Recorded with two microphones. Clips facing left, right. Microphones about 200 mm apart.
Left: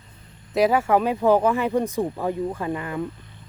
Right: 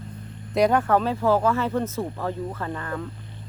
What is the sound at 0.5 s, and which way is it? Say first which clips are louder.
Speech: left 1 dB; 5° left (ahead or behind).